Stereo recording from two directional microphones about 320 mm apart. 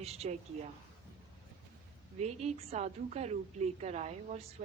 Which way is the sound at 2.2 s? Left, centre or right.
Right.